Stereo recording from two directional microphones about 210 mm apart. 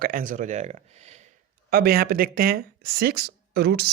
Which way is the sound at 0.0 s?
40° right (ahead or behind).